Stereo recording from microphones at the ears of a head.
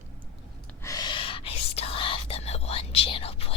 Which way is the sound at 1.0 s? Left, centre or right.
Left.